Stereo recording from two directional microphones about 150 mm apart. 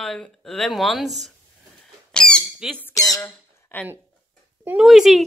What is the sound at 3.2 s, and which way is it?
Squawk, 10° left (ahead or behind).